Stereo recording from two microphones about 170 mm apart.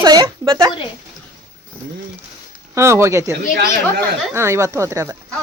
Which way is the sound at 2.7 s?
15° right (ahead or behind).